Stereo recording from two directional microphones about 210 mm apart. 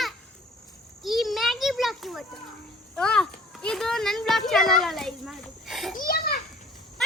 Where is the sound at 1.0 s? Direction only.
Centre (ahead or behind).